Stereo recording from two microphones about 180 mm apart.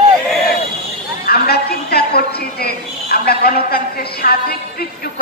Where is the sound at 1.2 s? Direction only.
60° left (ahead or behind).